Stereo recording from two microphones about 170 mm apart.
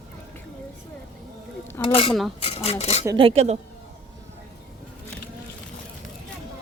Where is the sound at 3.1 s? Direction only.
35° right (ahead or behind).